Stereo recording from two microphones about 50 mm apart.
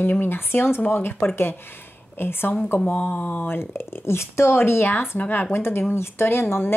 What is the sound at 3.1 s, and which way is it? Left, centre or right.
Speech, left.